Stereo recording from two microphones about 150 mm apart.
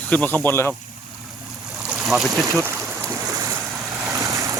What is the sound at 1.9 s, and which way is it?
Stream, 5° right (ahead or behind).